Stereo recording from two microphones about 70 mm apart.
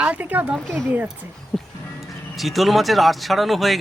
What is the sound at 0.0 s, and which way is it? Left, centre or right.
Speech, right.